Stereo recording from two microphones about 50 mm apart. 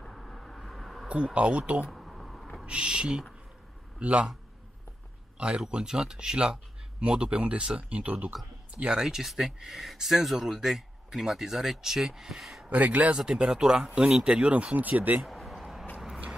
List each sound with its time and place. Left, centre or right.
0.0 s a sound: centre
1.0 s speech: right
1.9 s a sound: centre
2.6 s speech: right
5.7 s speech: centre
8.7 s speech: centre
9.0 s speech: centre
12.6 s speech: right
13.1 s speech: centre; by 15.2 s right
15.2 s a sound: centre